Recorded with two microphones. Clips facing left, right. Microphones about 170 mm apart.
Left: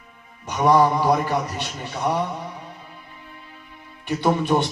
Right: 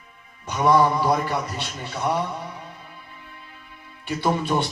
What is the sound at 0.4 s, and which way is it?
A man's voice, 15° left (ahead or behind).